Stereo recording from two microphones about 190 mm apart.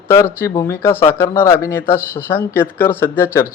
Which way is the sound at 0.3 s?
15° left (ahead or behind).